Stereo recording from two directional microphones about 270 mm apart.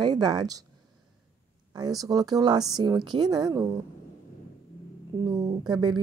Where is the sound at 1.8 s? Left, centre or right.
Centre.